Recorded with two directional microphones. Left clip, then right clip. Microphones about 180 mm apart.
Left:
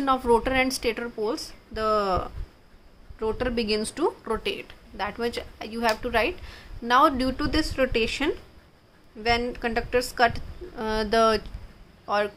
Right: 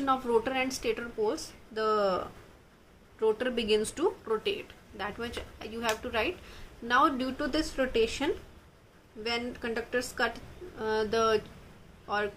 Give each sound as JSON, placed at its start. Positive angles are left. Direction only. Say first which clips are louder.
{"t": 0.0, "sound": "a woman's voice", "louder": "left 6 dB", "side_deg": 50}